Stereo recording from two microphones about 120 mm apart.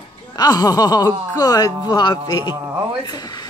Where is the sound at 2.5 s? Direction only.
20° right (ahead or behind).